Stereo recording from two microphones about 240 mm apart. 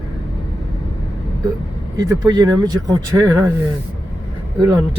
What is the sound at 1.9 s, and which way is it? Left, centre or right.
Speech, centre.